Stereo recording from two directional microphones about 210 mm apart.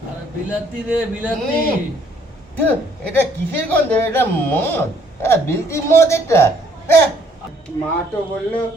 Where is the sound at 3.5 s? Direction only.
10° left (ahead or behind).